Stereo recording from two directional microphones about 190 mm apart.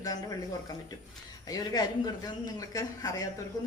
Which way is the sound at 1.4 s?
20° left (ahead or behind).